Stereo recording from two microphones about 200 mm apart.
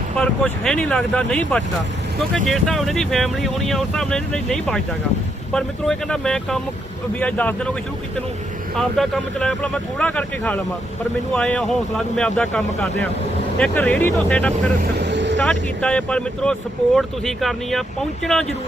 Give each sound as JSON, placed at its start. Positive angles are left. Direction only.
{"t": 0.2, "sound": "speech", "side_deg": 5}
{"t": 8.7, "sound": "speech", "side_deg": 0}
{"t": 14.8, "sound": "vehicle", "side_deg": -55}
{"t": 15.4, "sound": "speech", "side_deg": 5}